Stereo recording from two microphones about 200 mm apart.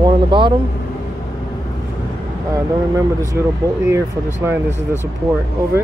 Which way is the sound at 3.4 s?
10° right (ahead or behind).